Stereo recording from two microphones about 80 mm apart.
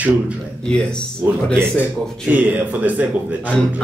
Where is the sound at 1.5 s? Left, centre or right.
Right.